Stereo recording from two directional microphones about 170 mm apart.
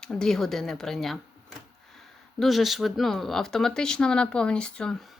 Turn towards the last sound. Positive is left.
turn(degrees=5)  # may be behind; listen again after turning